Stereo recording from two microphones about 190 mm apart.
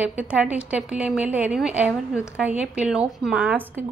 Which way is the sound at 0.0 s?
5° right (ahead or behind).